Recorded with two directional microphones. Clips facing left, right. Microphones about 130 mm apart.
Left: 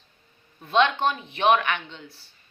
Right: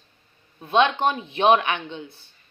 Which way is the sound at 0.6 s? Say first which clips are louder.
Right 2 dB; 20° right (ahead or behind).